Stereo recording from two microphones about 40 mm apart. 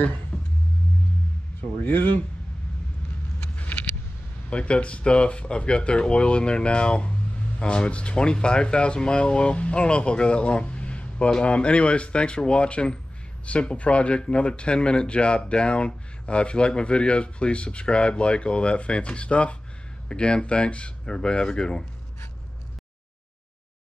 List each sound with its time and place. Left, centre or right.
1.8 s speech: left
3.5 s vehicle: left
4.5 s speech: left